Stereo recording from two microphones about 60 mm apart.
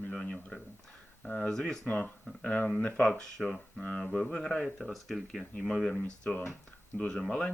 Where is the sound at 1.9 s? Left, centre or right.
Left.